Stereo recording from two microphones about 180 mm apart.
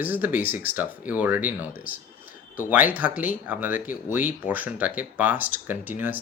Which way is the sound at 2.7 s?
10° right (ahead or behind).